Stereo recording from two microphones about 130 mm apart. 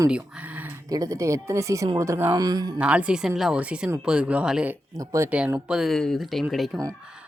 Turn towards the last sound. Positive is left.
turn(degrees=0)  # may be behind; listen again after turning